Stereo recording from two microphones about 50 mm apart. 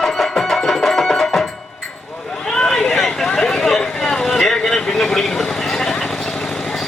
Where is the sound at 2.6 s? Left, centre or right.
Centre.